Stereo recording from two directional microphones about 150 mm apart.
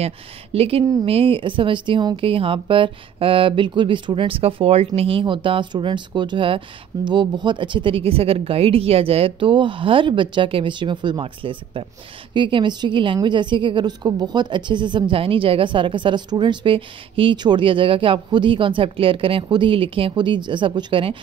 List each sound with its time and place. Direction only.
0.0 s a woman's voice: 40° right (ahead or behind)